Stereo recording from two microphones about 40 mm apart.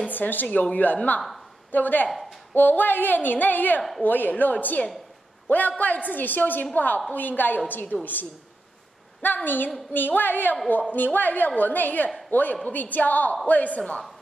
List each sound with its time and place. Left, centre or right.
0.1 s a woman's voice: left
2.0 s a woman's voice: centre
2.5 s a woman's voice: left